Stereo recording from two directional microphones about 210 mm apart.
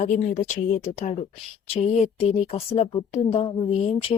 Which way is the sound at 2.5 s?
30° left (ahead or behind).